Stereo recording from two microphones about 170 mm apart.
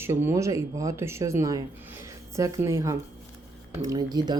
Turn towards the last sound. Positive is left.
turn(degrees=-25)  # may be behind; listen again after turning